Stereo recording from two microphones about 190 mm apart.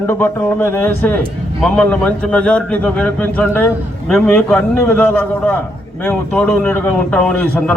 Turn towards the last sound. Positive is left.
turn(degrees=10)  # may be behind; listen again after turning